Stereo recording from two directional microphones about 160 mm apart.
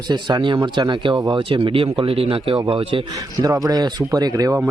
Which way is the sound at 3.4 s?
20° right (ahead or behind).